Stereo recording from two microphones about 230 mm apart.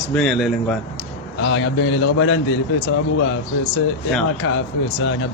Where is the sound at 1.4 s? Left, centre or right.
Left.